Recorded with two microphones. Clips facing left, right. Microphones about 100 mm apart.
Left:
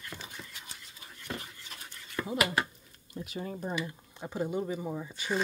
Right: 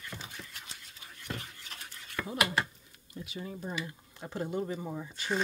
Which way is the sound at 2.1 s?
15° left (ahead or behind).